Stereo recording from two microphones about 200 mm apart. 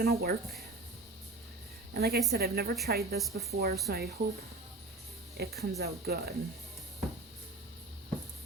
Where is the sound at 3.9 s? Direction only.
50° right (ahead or behind).